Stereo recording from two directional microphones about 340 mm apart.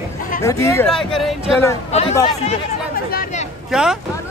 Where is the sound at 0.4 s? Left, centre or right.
Centre.